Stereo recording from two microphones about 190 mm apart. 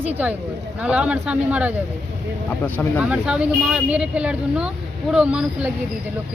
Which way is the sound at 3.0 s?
5° right (ahead or behind).